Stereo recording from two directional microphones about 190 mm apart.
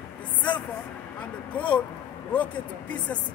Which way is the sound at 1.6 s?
5° left (ahead or behind).